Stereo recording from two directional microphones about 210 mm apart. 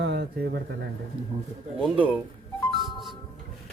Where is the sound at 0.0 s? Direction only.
50° right (ahead or behind).